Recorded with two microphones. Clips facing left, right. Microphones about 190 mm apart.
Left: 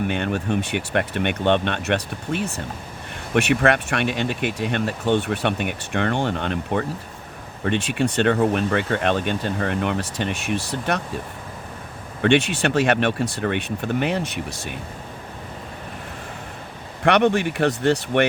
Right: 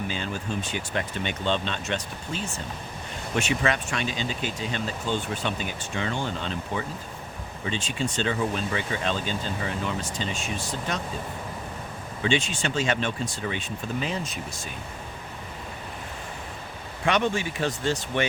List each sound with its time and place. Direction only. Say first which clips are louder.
0.1 s speech: left 8 dB; 65° left (ahead or behind)
12.2 s speech: left 8 dB; 65° left (ahead or behind)
17.0 s speech: left 7 dB; 65° left (ahead or behind)